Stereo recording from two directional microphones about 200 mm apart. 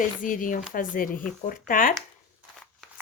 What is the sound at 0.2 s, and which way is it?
A woman's voice, 40° left (ahead or behind).